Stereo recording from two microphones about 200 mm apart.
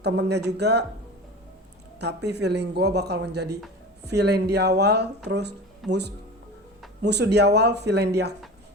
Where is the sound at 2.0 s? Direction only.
55° right (ahead or behind).